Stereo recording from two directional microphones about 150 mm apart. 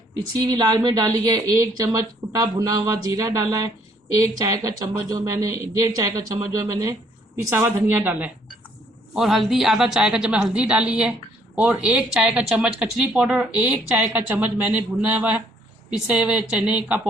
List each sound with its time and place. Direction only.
0.3 s speech: 25° right (ahead or behind)
9.1 s a woman's voice: centre (ahead or behind)